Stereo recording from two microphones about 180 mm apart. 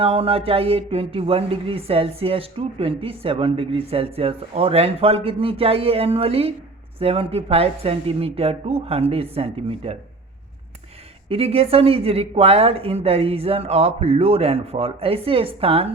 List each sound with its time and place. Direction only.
0.0 s speech: 30° right (ahead or behind)
11.3 s speech: 30° right (ahead or behind)